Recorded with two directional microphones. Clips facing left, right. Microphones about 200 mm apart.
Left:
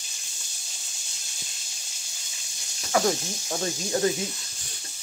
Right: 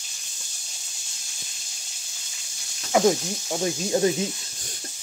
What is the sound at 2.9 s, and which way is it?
Speech, 20° right (ahead or behind).